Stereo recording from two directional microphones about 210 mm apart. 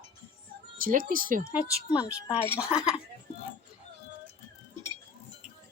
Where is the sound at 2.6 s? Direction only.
5° right (ahead or behind).